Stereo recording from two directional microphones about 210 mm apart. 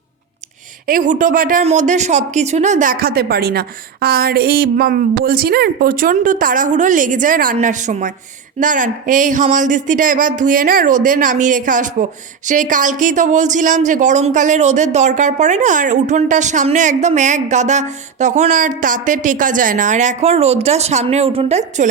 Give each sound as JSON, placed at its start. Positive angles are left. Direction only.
{"t": 0.9, "sound": "speech", "side_deg": -40}